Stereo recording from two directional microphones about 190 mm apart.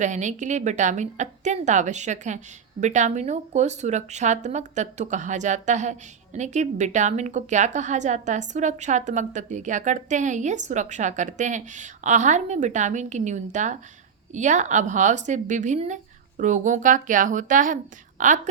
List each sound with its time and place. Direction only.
0.0 s speech: 40° right (ahead or behind)